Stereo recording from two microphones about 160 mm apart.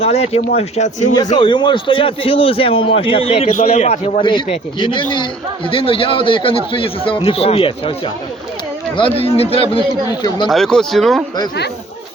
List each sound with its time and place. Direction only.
0.0 s a man's voice: 40° left (ahead or behind)
1.4 s a man's voice: 30° left (ahead or behind); by 4.2 s 45° left (ahead or behind)
4.2 s a man's voice: 30° left (ahead or behind)
10.5 s speech: 5° left (ahead or behind)